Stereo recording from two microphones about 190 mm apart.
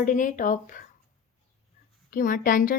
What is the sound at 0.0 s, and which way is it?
Speech, 40° left (ahead or behind).